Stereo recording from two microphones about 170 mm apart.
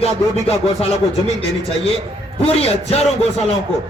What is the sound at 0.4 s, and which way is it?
Speech, 35° left (ahead or behind).